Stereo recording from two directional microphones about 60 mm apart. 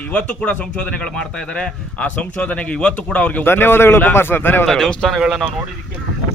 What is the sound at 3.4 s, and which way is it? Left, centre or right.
A man's voice, left.